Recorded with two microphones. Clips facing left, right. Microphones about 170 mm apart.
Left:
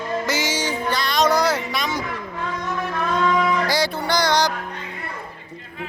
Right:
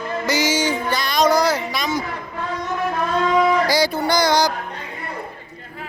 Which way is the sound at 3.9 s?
40° right (ahead or behind).